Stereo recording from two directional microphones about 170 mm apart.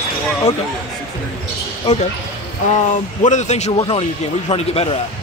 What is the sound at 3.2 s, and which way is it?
Speech, 45° left (ahead or behind).